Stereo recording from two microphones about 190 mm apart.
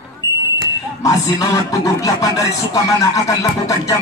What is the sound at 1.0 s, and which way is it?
Speech, 20° left (ahead or behind).